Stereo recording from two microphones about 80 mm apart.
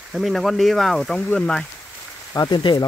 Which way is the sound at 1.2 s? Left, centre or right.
Centre.